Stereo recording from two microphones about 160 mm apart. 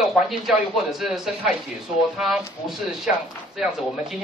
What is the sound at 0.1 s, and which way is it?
Speech, centre (ahead or behind).